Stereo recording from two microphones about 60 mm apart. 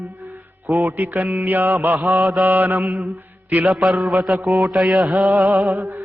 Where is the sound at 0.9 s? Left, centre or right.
Right.